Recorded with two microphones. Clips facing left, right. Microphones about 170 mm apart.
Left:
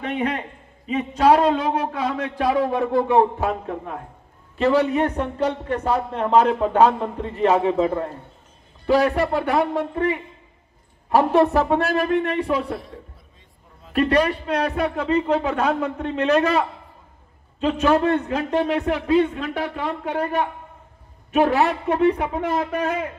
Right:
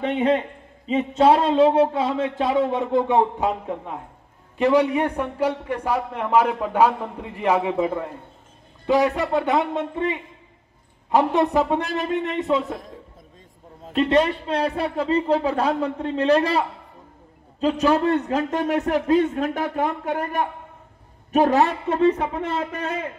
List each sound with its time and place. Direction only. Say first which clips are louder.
0.0 s a man's voice: right 4 dB; 25° right (ahead or behind)
13.9 s a man's voice: even; 25° right (ahead or behind); by 21.6 s 40° right (ahead or behind)